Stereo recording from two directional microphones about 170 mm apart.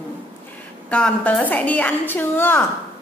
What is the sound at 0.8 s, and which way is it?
A woman's voice, 5° left (ahead or behind).